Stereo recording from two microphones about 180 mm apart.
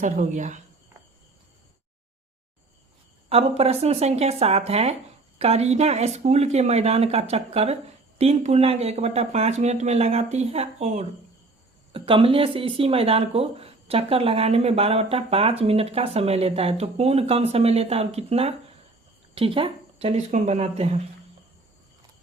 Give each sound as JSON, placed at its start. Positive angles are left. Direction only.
{"t": 0.0, "sound": "speech", "side_deg": -45}
{"t": 3.2, "sound": "speech", "side_deg": -35}